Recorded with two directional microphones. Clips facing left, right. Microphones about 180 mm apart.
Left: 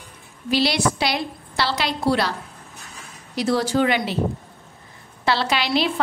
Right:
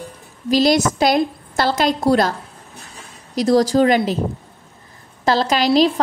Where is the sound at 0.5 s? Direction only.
45° right (ahead or behind).